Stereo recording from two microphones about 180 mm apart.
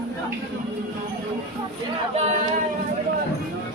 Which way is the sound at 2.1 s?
35° right (ahead or behind).